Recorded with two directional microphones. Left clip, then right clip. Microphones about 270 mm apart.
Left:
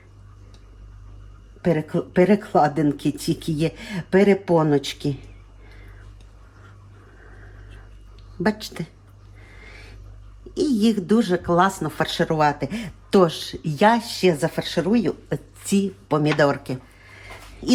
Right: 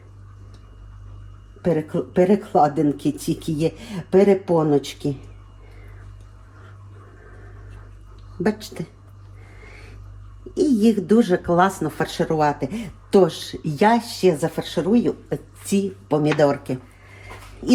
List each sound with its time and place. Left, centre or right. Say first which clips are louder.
1.6 s speech: right 1 dB; left
8.4 s speech: even; centre
10.5 s speech: right 3 dB; centre
17.6 s dog: right 2 dB; centre